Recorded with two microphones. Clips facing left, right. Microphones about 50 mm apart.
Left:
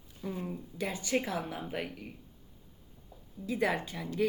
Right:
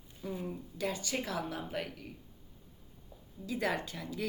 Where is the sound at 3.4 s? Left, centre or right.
Centre.